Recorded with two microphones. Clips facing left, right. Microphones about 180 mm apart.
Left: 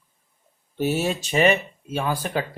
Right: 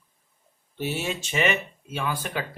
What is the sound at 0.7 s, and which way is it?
Speech, 40° left (ahead or behind).